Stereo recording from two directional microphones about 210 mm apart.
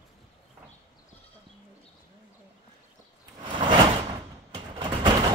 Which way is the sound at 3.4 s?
20° right (ahead or behind).